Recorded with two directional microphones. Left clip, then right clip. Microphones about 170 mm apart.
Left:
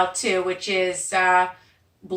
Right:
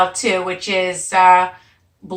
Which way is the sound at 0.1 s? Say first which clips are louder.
Right 4 dB; 15° left (ahead or behind).